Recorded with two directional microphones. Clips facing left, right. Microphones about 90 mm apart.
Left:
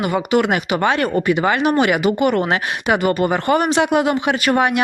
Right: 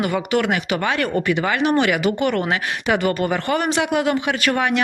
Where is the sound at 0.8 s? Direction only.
30° left (ahead or behind).